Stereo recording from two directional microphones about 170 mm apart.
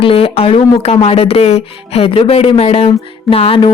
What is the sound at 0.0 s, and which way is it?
Speech, 35° left (ahead or behind).